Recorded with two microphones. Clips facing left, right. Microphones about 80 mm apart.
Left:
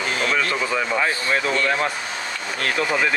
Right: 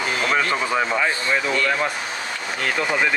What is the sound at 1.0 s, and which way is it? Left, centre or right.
Speech, centre.